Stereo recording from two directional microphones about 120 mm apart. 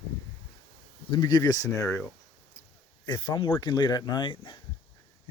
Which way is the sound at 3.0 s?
35° left (ahead or behind).